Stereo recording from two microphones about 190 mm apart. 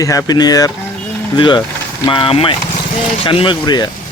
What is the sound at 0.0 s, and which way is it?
Speech, 20° left (ahead or behind).